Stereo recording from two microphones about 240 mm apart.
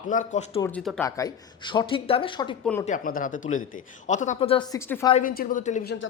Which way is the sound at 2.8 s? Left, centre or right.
Left.